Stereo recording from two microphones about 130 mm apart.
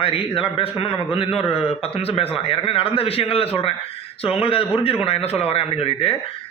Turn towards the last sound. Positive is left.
turn(degrees=50)  # may be behind; listen again after turning